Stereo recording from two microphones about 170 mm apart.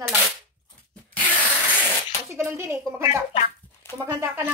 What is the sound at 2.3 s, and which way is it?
Speech, 15° right (ahead or behind).